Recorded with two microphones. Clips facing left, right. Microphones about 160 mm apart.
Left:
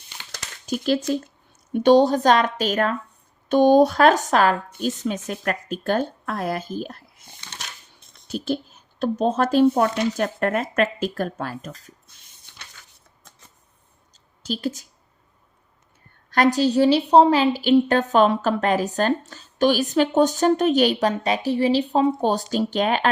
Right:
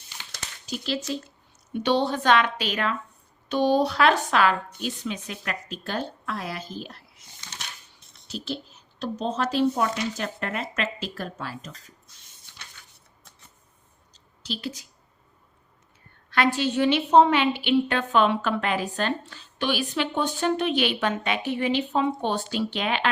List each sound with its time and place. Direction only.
0.3 s a sound: 50° left (ahead or behind)
1.7 s speech: 45° left (ahead or behind)
8.3 s speech: 50° left (ahead or behind)
14.4 s a woman's voice: 45° left (ahead or behind)
16.3 s a woman's voice: 40° left (ahead or behind)